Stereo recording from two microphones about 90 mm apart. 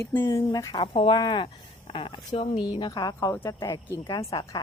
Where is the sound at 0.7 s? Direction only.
65° left (ahead or behind).